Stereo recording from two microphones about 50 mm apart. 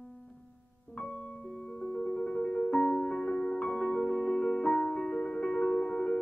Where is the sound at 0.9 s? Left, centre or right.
Centre.